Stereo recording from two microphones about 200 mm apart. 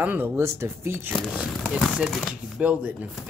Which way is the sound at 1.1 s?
Centre (ahead or behind).